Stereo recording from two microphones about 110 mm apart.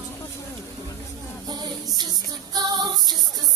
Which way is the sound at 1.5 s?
40° right (ahead or behind).